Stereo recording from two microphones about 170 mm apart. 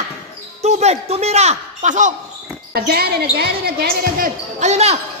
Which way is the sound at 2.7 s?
65° right (ahead or behind).